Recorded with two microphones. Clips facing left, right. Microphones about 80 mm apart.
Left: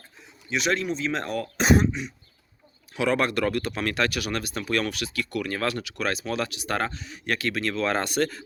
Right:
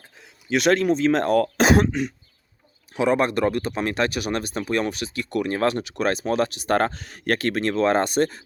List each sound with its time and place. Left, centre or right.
0.5 s speech: right
1.5 s throat clearing: right
2.9 s speech: right